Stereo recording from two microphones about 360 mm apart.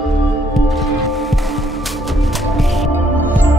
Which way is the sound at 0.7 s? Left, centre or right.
Centre.